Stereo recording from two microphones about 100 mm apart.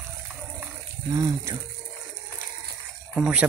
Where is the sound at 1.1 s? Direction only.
35° right (ahead or behind).